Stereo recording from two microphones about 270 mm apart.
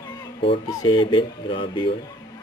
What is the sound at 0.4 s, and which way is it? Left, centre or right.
Speech, centre.